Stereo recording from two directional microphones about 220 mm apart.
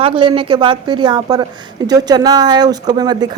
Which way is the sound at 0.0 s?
25° right (ahead or behind).